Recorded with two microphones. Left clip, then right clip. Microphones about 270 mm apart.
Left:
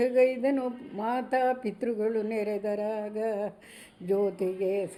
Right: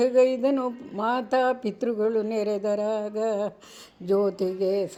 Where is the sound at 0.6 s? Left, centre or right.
Right.